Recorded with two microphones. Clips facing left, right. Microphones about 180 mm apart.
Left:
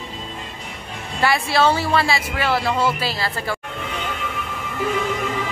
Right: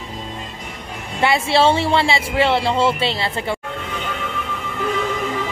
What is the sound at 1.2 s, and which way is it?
Speech, 25° right (ahead or behind).